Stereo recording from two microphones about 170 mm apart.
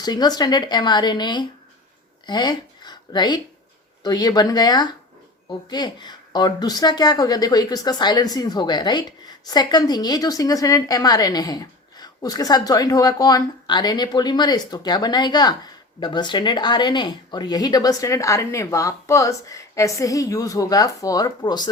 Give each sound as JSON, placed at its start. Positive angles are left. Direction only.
{"t": 0.0, "sound": "a woman's voice", "side_deg": 25}